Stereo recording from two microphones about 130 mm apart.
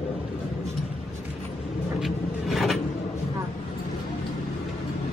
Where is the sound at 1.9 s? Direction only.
Centre (ahead or behind).